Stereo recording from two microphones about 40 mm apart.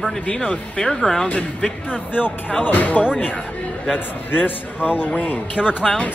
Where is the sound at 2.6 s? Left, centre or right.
Left.